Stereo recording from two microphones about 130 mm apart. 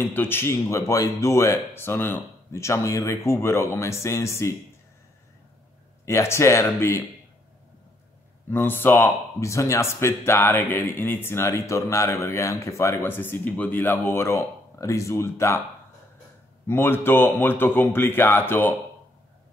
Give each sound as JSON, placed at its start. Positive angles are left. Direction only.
{"t": 0.0, "sound": "speech", "side_deg": 15}
{"t": 6.0, "sound": "speech", "side_deg": 20}
{"t": 8.5, "sound": "speech", "side_deg": 15}
{"t": 16.6, "sound": "speech", "side_deg": 15}